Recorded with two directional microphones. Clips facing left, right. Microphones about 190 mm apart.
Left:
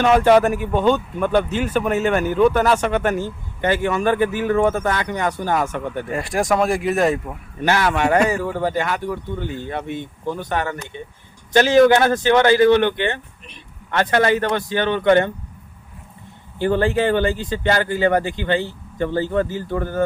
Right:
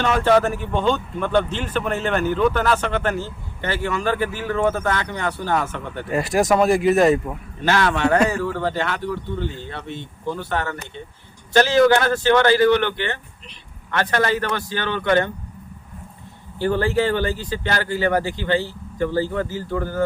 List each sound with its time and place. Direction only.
0.0 s speech: 15° left (ahead or behind)
6.1 s speech: 5° right (ahead or behind)
7.6 s speech: 15° left (ahead or behind)
16.6 s speech: 20° left (ahead or behind)